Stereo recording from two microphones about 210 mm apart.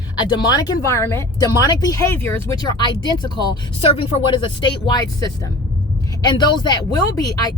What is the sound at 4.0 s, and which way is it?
Speech, 25° left (ahead or behind).